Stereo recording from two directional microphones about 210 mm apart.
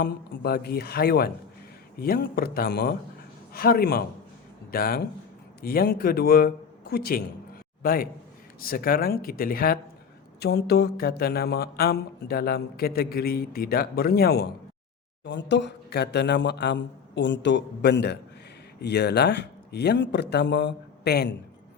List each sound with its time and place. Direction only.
0.0 s a man's voice: 50° left (ahead or behind)